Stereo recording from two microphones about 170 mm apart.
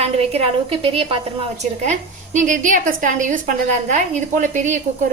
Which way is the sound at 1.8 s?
45° right (ahead or behind).